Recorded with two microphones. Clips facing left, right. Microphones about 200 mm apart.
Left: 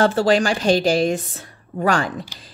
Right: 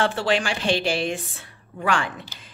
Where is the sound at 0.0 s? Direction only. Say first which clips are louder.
Left 6 dB; 40° left (ahead or behind).